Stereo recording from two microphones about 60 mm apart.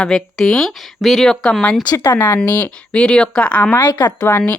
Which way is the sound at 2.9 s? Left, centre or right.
Centre.